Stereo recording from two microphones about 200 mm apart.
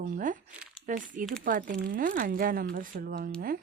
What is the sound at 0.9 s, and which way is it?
Speech, 40° right (ahead or behind).